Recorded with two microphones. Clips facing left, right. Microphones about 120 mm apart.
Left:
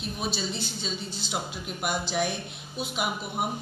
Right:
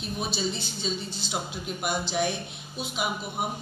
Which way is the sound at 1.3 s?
5° left (ahead or behind).